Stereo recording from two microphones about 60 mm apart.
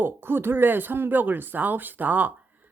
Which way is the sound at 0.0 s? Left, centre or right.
Right.